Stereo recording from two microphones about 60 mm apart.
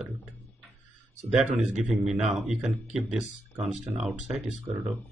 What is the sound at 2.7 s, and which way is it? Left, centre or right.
Speech, right.